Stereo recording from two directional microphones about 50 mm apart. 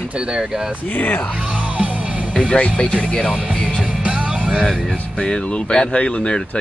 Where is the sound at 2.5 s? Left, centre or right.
Left.